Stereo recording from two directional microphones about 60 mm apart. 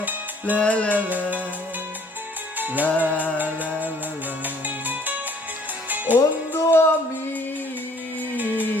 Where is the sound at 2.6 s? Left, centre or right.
Right.